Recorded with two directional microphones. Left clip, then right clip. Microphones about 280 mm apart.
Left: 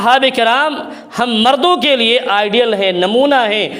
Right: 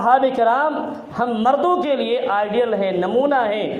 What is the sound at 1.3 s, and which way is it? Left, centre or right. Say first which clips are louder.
A man's voice: left 6 dB; left.